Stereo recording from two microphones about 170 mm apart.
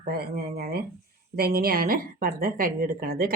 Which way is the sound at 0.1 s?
65° right (ahead or behind).